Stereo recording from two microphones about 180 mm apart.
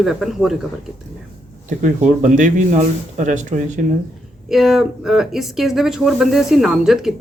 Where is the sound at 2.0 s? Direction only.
45° right (ahead or behind).